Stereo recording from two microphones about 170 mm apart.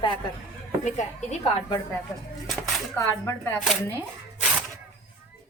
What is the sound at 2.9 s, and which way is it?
Speech, 15° left (ahead or behind).